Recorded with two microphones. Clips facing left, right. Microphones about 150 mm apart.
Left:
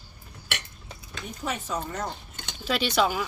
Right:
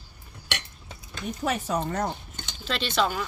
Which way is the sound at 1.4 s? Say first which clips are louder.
Right 4 dB; 60° right (ahead or behind).